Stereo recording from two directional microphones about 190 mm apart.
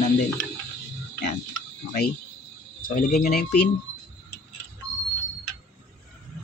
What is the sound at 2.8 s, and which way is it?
Speech, 45° left (ahead or behind).